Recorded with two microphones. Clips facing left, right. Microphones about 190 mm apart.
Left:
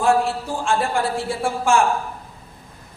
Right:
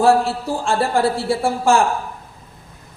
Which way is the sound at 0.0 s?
35° right (ahead or behind).